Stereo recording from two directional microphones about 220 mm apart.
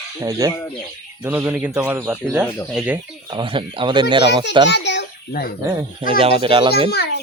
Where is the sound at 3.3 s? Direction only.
20° right (ahead or behind).